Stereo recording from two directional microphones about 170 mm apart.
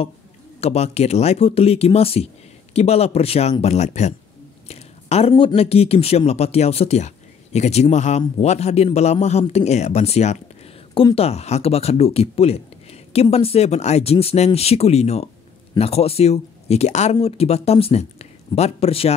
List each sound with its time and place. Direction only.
0.6 s speech: 40° left (ahead or behind)
4.6 s a sound: 40° left (ahead or behind)
5.3 s speech: 25° left (ahead or behind)
5.6 s speech: 35° left (ahead or behind)